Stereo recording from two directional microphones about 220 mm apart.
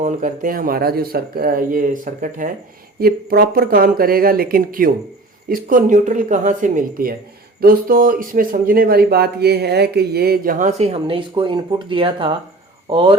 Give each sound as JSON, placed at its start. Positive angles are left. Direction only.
{"t": 0.0, "sound": "speech", "side_deg": -35}